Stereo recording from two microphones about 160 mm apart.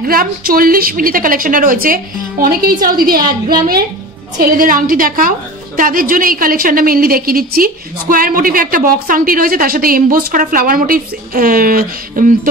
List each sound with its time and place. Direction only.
0.0 s a woman's voice: 65° right (ahead or behind)